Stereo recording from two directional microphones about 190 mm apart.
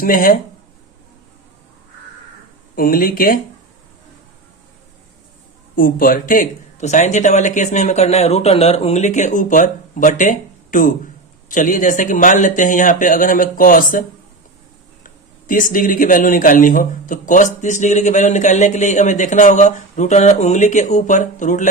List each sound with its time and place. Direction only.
0.0 s speech: 50° left (ahead or behind)
2.7 s speech: 50° left (ahead or behind)
5.7 s speech: 50° left (ahead or behind)
15.0 s speech: 45° left (ahead or behind)